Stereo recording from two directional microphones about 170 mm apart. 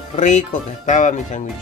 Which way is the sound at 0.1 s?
45° left (ahead or behind).